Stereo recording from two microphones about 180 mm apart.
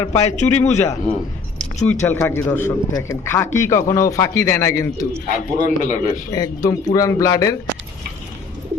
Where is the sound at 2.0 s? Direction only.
10° left (ahead or behind).